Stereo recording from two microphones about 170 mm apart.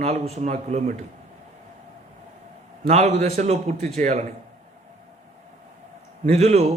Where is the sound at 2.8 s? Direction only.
40° right (ahead or behind).